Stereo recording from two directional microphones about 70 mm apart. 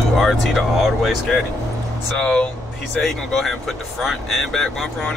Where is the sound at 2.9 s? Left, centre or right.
Centre.